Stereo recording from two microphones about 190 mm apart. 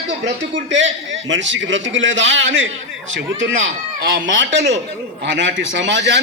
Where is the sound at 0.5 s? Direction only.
75° right (ahead or behind).